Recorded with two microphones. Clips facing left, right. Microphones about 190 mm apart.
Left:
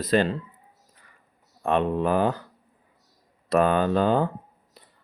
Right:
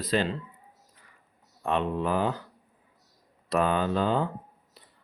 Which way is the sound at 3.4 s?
50° left (ahead or behind).